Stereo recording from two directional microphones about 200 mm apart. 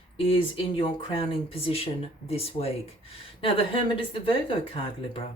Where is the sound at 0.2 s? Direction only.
25° left (ahead or behind).